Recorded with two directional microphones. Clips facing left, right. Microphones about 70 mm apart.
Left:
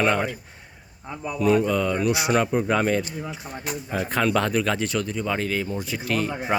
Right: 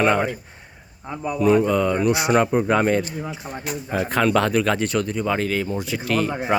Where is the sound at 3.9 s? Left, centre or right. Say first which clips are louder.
Right 3 dB; right.